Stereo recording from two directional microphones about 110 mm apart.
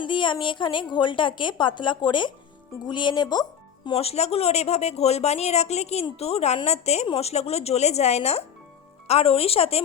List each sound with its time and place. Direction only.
0.0 s a woman's voice: 50° left (ahead or behind)
3.9 s a woman's voice: 70° left (ahead or behind)